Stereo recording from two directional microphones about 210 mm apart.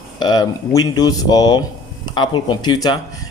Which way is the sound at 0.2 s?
20° left (ahead or behind).